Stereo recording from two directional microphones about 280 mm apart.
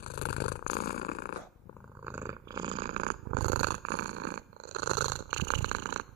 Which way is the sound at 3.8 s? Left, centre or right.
Right.